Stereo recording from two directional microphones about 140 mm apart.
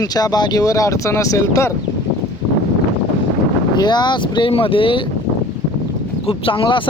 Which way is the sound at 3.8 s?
30° left (ahead or behind).